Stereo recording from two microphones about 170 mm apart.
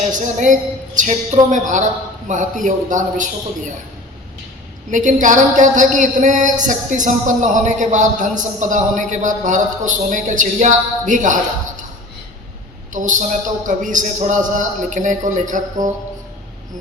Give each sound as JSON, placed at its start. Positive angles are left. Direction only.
{"t": 0.1, "sound": "speech", "side_deg": -45}
{"t": 4.9, "sound": "speech", "side_deg": -50}
{"t": 12.9, "sound": "speech", "side_deg": -50}